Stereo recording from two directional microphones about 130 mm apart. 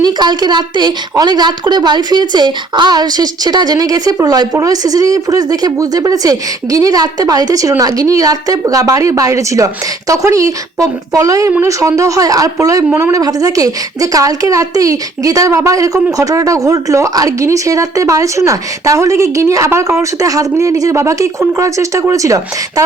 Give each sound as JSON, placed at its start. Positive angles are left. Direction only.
{"t": 0.0, "sound": "a woman's voice", "side_deg": -35}